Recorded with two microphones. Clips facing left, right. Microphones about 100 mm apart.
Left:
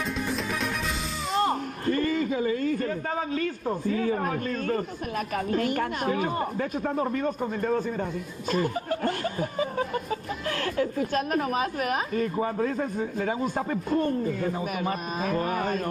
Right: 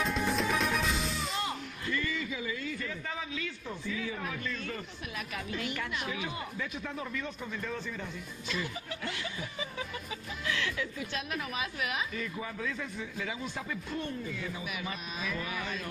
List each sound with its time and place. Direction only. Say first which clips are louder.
0.0 s music: left 1 dB; centre (ahead or behind)
1.3 s a sound: left 10 dB; 45° left (ahead or behind)
3.3 s speech: left 11 dB; 45° left (ahead or behind)